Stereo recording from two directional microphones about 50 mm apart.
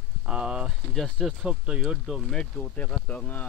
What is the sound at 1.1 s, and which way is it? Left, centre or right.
Speech, centre.